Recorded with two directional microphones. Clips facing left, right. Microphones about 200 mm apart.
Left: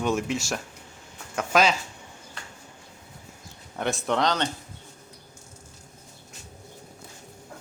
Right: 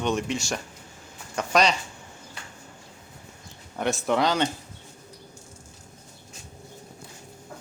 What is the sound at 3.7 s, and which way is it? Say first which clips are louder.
Speech: right 2 dB; centre (ahead or behind).